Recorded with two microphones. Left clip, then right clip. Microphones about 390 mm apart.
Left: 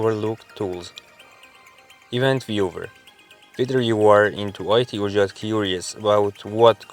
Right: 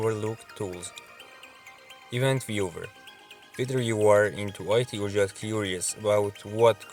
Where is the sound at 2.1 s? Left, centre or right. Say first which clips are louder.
Left 6 dB; right.